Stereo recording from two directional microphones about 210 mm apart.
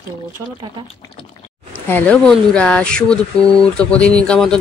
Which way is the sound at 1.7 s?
10° left (ahead or behind).